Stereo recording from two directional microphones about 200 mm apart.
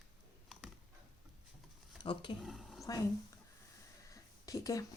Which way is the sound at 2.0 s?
25° left (ahead or behind).